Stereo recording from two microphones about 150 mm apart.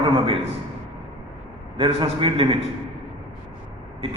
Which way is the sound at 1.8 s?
35° right (ahead or behind).